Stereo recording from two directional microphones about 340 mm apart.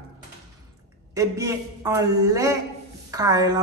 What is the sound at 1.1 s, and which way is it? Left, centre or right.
A man's voice, centre.